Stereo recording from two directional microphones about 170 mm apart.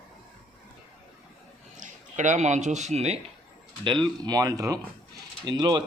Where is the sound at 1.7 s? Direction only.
50° right (ahead or behind).